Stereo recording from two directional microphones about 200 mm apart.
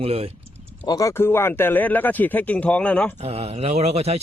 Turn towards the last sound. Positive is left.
turn(degrees=-30)  # may be behind; listen again after turning